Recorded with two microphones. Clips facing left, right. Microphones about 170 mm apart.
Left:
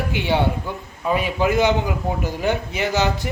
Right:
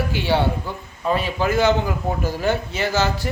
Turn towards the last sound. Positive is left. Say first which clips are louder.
# even
turn(degrees=20)  # may be behind; listen again after turning